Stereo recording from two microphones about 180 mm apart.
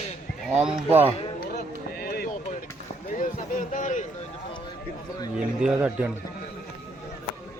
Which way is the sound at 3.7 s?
45° left (ahead or behind).